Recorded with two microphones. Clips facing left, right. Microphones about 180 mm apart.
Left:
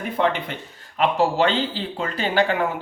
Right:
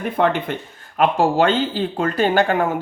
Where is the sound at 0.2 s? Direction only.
50° right (ahead or behind).